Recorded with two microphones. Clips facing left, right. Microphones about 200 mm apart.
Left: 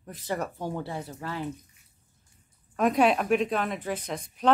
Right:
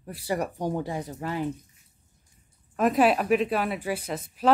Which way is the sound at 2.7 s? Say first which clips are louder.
Right 1 dB; 5° right (ahead or behind).